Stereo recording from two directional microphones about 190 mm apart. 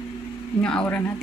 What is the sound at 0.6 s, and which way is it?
Speech, 5° left (ahead or behind).